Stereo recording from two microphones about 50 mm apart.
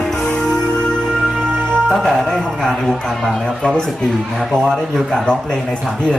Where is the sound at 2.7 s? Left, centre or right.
Centre.